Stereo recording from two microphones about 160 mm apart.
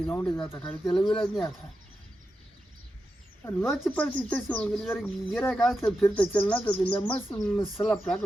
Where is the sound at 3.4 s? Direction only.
15° left (ahead or behind).